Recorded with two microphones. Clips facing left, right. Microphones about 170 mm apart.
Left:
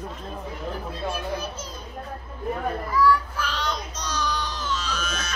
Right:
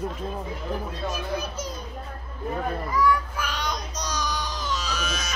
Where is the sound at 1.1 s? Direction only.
10° right (ahead or behind).